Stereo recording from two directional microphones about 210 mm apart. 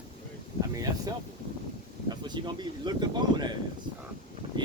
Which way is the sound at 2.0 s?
20° right (ahead or behind).